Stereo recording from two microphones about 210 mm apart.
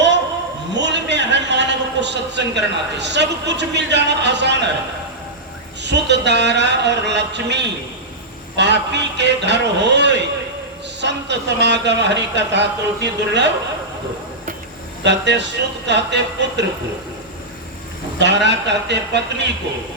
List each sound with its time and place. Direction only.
0.8 s a man's voice: 55° right (ahead or behind)
5.8 s speech: 55° right (ahead or behind)
15.0 s speech: 55° right (ahead or behind)
18.2 s speech: 55° right (ahead or behind)